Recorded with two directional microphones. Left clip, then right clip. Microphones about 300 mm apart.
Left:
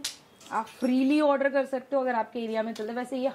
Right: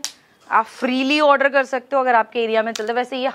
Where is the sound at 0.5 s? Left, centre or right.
Centre.